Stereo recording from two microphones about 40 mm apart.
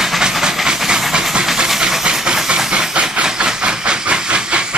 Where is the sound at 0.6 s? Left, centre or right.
Centre.